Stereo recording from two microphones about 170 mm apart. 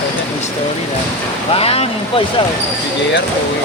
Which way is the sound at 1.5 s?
35° left (ahead or behind).